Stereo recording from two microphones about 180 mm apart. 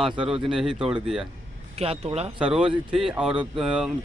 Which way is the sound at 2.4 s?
5° right (ahead or behind).